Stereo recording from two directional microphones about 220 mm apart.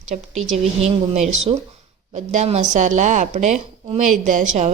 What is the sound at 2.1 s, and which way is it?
A woman's voice, 35° right (ahead or behind).